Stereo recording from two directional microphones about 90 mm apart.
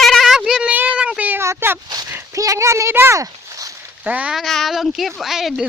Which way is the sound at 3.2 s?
40° right (ahead or behind).